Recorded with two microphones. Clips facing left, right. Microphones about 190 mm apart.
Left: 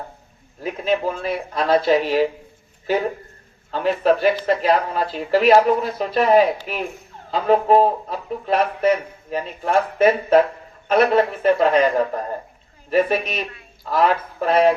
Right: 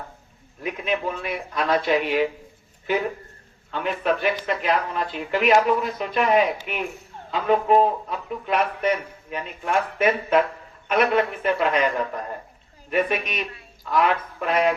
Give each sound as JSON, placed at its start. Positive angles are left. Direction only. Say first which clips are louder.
{"t": 0.6, "sound": "a man's voice", "louder": "left 5 dB", "side_deg": 30}